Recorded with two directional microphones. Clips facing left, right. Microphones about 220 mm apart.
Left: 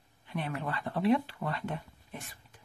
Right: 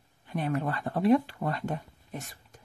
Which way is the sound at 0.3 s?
45° right (ahead or behind).